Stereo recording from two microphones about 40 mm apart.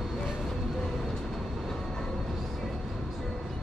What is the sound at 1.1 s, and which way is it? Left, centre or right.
Vehicle, centre.